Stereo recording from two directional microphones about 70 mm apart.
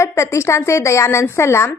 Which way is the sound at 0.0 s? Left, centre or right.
Left.